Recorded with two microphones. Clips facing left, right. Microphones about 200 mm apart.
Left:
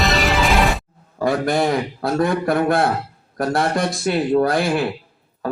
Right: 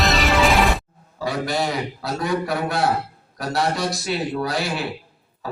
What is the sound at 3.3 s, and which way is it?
A man's voice, 50° left (ahead or behind).